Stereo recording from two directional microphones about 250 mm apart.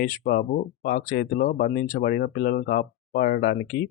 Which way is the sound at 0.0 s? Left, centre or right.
Left.